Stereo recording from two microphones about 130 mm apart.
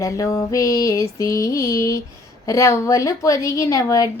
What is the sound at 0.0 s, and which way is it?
A woman's voice, 25° left (ahead or behind).